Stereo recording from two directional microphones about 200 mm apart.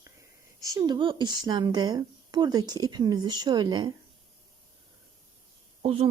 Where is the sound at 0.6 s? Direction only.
20° right (ahead or behind).